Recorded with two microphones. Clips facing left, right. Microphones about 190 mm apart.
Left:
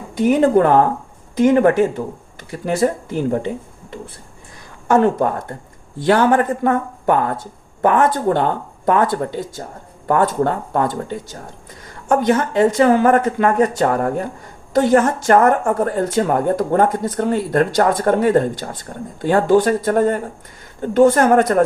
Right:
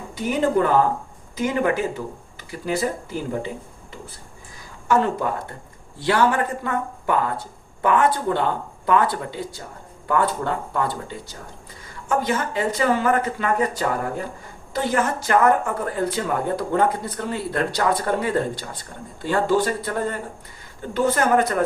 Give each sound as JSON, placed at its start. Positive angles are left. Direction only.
{"t": 0.1, "sound": "speech", "side_deg": 55}
{"t": 4.9, "sound": "speech", "side_deg": 50}